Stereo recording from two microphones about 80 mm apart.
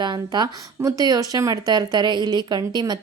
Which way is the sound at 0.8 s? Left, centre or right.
Right.